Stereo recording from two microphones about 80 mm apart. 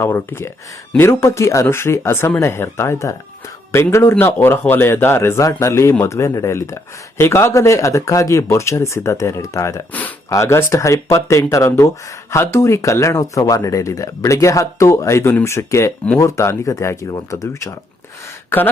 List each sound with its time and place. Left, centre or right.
0.0 s speech: left